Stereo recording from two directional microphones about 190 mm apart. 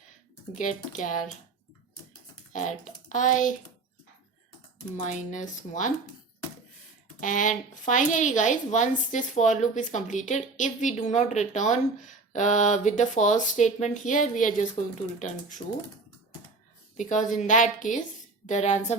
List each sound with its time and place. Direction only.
0.5 s speech: 40° left (ahead or behind)
2.5 s speech: 40° left (ahead or behind)
4.9 s speech: 40° left (ahead or behind)
7.2 s speech: 40° left (ahead or behind)
17.0 s speech: 40° left (ahead or behind)